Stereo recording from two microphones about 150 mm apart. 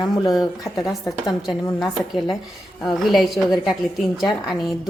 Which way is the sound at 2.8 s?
Centre (ahead or behind).